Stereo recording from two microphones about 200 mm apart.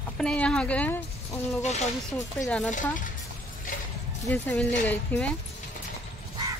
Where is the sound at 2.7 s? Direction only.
40° left (ahead or behind).